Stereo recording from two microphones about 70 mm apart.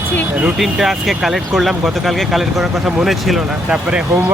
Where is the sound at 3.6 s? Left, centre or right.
Centre.